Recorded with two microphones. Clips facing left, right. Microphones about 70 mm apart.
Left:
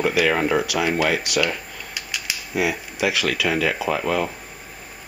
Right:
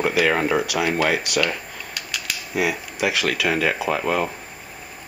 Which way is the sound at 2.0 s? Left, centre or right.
Centre.